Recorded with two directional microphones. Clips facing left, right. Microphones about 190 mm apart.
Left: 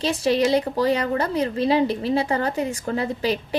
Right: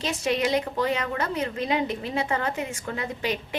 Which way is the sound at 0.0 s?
35° left (ahead or behind).